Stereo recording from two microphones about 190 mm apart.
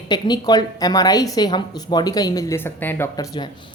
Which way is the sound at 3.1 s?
20° left (ahead or behind).